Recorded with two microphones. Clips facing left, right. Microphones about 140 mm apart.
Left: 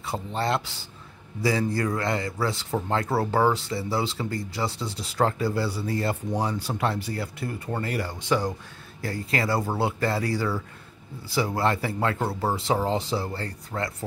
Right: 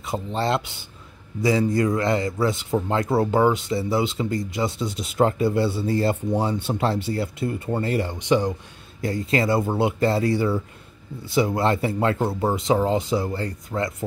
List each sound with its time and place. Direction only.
0.0 s speech: 20° right (ahead or behind)